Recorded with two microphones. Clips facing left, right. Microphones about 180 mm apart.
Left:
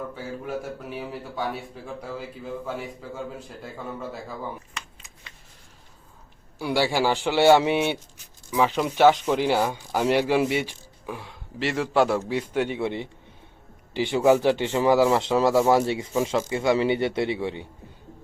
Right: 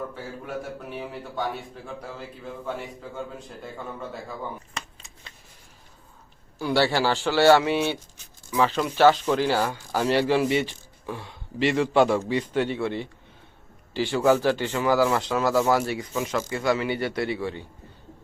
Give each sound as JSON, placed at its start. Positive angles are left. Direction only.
{"t": 0.4, "sound": "a man's voice", "side_deg": 0}
{"t": 6.6, "sound": "speech", "side_deg": 10}